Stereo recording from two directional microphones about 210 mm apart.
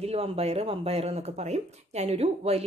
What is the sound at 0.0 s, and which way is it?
Speech, 30° right (ahead or behind).